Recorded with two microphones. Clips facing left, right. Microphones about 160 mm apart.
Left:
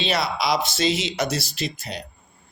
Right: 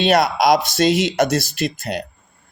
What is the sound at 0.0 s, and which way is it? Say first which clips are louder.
Speech: right 9 dB; 50° right (ahead or behind).